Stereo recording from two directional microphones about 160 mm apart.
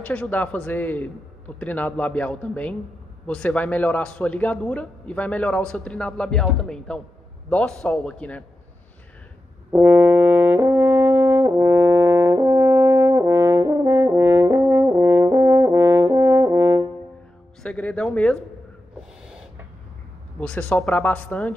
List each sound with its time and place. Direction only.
0.0 s a man's voice: 10° left (ahead or behind)
9.7 s brass instrument: 15° right (ahead or behind)
17.6 s speech: 5° left (ahead or behind)
20.3 s a man's voice: 10° left (ahead or behind)